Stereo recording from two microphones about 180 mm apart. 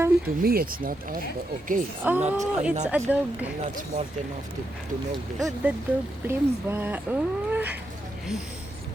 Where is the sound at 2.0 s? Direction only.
10° right (ahead or behind).